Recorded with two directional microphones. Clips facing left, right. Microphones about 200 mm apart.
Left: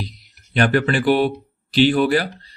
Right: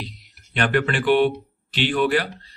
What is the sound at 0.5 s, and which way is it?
Speech, 40° left (ahead or behind).